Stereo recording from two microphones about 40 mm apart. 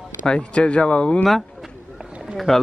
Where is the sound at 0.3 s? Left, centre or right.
Left.